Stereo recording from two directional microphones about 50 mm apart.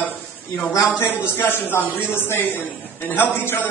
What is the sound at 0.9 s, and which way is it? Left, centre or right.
Speech, left.